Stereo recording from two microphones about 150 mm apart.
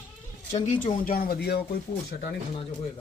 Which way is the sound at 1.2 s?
85° left.